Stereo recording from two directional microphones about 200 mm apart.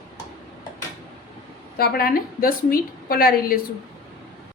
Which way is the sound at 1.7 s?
50° left (ahead or behind).